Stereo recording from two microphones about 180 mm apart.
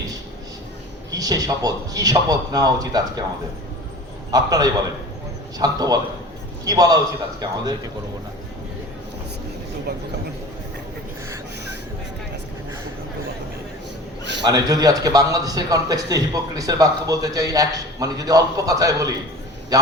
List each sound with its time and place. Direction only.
1.1 s a man's voice: 20° right (ahead or behind)
4.3 s a man's voice: 20° right (ahead or behind)
14.4 s a man's voice: 20° right (ahead or behind)